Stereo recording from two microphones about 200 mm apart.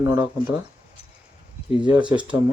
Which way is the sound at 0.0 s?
10° right (ahead or behind).